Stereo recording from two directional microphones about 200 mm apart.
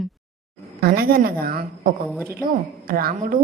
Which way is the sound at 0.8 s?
50° right (ahead or behind).